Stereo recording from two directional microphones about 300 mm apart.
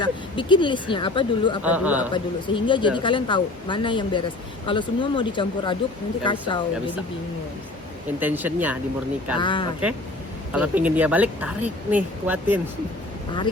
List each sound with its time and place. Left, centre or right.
0.0 s speech: centre
1.6 s speech: centre
2.1 s speech: centre
8.2 s speech: centre
9.4 s speech: centre
10.5 s speech: centre